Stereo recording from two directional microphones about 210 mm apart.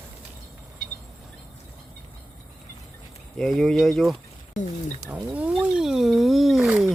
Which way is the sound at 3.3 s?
Centre (ahead or behind).